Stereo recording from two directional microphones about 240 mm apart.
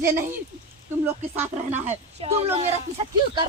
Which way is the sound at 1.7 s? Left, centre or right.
Right.